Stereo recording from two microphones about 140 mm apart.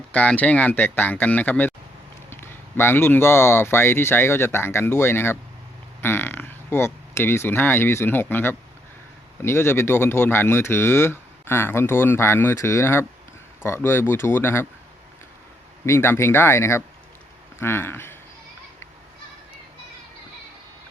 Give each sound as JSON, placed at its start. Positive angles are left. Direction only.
{"t": 0.1, "sound": "speech", "side_deg": 10}
{"t": 15.9, "sound": "speech", "side_deg": 20}